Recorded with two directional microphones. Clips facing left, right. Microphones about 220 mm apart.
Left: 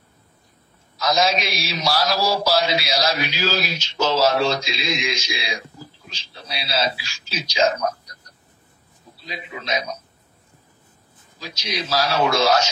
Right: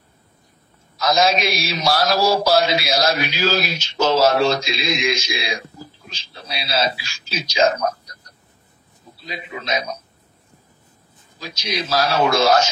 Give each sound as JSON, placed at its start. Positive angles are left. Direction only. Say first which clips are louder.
{"t": 1.0, "sound": "a man's voice", "louder": "right 3 dB", "side_deg": -50}
{"t": 9.3, "sound": "a man's voice", "louder": "right 2 dB", "side_deg": -50}
{"t": 11.9, "sound": "a man's voice", "louder": "right 2 dB", "side_deg": -50}